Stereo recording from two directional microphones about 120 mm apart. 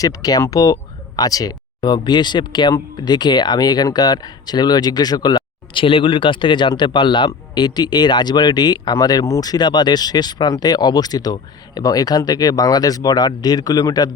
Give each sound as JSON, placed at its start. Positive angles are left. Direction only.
{"t": 0.0, "sound": "speech", "side_deg": 30}